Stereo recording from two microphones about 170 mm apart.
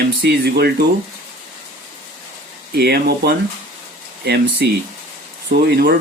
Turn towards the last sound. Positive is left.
turn(degrees=-75)  # may be behind; listen again after turning